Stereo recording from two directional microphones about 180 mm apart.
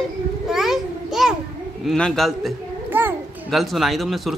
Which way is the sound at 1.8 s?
5° left (ahead or behind).